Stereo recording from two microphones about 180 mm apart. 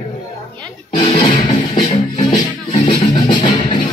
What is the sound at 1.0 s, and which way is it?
Music, 25° left (ahead or behind).